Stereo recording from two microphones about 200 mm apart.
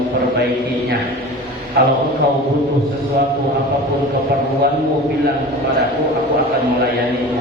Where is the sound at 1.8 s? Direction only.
55° right (ahead or behind).